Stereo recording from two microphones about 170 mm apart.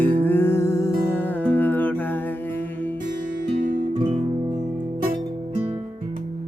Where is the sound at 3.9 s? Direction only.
35° right (ahead or behind).